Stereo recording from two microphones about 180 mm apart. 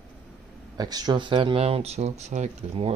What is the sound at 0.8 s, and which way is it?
Speech, 20° right (ahead or behind).